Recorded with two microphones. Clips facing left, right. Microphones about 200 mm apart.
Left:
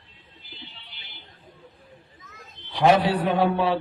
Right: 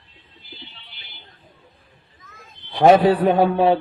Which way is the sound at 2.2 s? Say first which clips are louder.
Right 3 dB; 55° right (ahead or behind).